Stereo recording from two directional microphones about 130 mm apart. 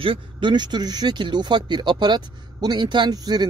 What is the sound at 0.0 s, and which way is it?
Speech, 40° right (ahead or behind).